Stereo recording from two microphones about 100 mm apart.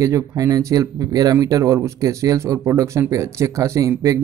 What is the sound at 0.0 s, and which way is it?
Speech, 35° right (ahead or behind).